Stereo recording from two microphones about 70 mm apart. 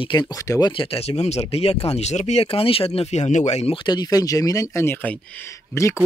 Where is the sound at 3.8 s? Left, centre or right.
Left.